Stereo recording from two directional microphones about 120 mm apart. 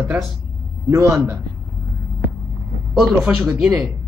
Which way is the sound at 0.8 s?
25° right (ahead or behind).